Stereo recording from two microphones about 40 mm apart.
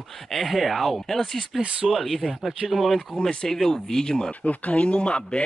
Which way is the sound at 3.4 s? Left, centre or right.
Centre.